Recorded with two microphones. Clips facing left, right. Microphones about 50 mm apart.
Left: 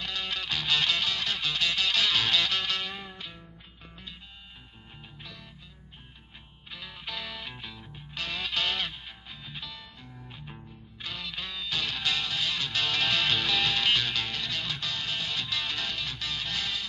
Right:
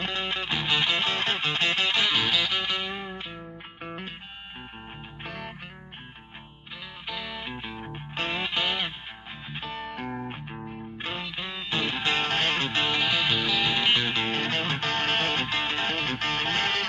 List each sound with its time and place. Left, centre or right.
0.0 s music: right
3.8 s music: right
5.2 s music: right
7.1 s music: centre
7.8 s music: right; by 8.9 s centre
9.5 s music: right
9.9 s music: right
11.0 s music: right
13.0 s music: centre; by 16.8 s right